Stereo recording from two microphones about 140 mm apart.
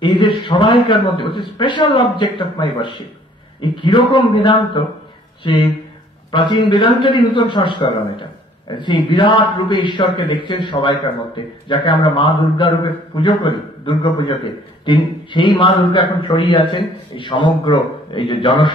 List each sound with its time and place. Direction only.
0.0 s a man's voice: 35° left (ahead or behind)